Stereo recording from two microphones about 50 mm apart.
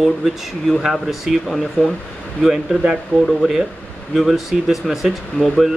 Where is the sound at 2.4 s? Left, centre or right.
Centre.